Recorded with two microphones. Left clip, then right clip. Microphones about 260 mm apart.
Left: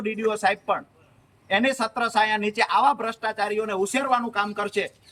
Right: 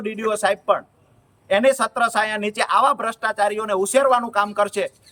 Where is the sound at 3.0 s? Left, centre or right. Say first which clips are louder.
Right 6 dB; centre.